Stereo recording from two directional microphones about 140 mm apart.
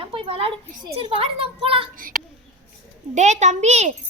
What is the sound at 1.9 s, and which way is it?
Speech, 90° right.